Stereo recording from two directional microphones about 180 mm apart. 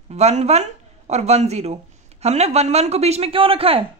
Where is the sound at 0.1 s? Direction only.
35° right (ahead or behind).